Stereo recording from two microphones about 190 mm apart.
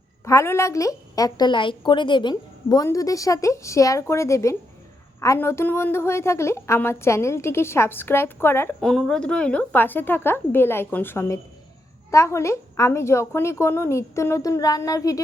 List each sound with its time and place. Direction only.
0.3 s a woman's voice: 15° left (ahead or behind)